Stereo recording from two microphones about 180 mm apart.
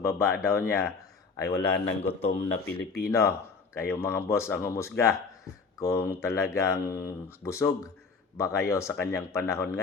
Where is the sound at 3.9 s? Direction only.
15° left (ahead or behind).